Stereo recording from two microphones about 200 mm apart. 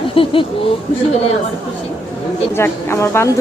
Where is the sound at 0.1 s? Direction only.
25° left (ahead or behind).